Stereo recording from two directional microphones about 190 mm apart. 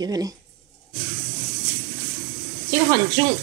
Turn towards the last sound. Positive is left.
turn(degrees=-20)  # may be behind; listen again after turning